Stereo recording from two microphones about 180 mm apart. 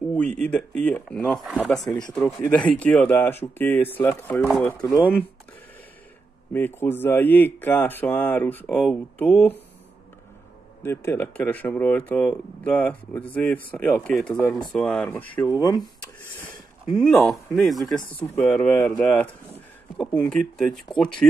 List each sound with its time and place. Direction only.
0.4 s speech: 5° left (ahead or behind)
6.5 s speech: 10° left (ahead or behind)
10.8 s speech: 15° left (ahead or behind)
16.9 s speech: centre (ahead or behind)
18.0 s speech: 10° left (ahead or behind)